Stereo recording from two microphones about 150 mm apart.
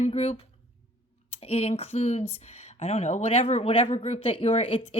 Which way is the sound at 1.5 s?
45° left (ahead or behind).